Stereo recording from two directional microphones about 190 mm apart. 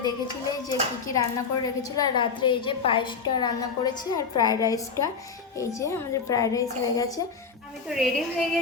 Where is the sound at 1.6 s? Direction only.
20° left (ahead or behind).